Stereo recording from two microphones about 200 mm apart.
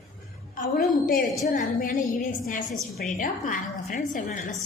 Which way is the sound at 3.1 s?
40° left (ahead or behind).